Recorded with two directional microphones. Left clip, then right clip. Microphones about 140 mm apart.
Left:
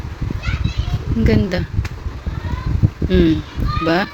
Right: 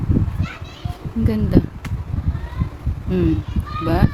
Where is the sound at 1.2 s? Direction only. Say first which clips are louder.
Left 1 dB; 10° right (ahead or behind).